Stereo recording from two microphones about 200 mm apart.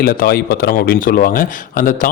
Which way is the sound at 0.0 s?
50° left (ahead or behind).